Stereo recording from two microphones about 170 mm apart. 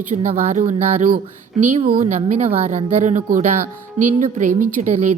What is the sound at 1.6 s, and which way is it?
A woman's voice, 35° right (ahead or behind).